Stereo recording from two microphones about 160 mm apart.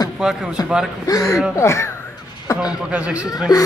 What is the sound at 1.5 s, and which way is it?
Speech, 20° left (ahead or behind).